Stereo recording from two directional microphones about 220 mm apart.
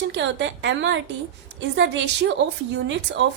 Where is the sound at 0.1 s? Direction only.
55° right (ahead or behind).